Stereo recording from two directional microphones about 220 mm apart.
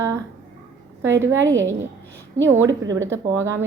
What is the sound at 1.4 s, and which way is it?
Speech, 60° right (ahead or behind).